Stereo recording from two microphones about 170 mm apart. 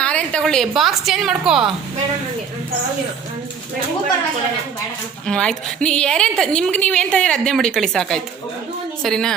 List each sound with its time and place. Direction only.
0.0 s a woman's voice: 5° left (ahead or behind)
5.2 s a woman's voice: 5° left (ahead or behind)